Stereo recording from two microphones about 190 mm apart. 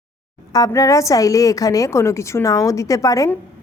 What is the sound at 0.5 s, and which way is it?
Speech, 20° left (ahead or behind).